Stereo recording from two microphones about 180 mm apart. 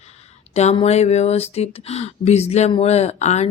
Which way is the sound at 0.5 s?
35° left (ahead or behind).